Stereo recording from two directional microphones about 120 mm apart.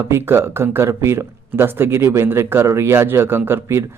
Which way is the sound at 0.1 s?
20° right (ahead or behind).